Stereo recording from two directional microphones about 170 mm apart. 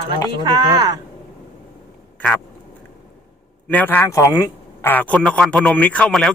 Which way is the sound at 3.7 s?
10° left (ahead or behind).